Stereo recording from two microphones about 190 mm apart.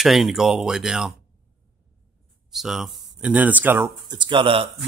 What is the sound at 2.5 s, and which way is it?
Speech, centre (ahead or behind).